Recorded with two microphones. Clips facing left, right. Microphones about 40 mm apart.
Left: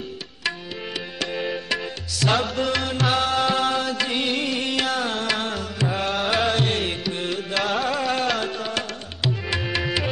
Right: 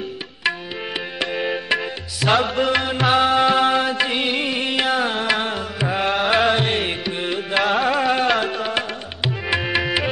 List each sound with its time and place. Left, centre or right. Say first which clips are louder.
1.2 s tabla: right 3 dB; right